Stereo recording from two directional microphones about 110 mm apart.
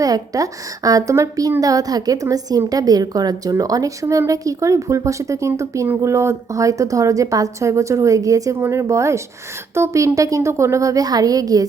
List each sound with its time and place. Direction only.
0.0 s a woman's voice: 30° right (ahead or behind)